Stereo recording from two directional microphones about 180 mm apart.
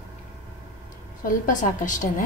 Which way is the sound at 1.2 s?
45° left (ahead or behind).